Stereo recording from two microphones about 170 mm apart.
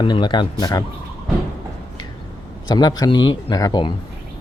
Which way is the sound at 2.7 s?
25° left (ahead or behind).